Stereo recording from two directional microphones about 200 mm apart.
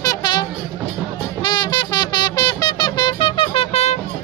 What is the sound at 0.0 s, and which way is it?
Music, 20° left (ahead or behind).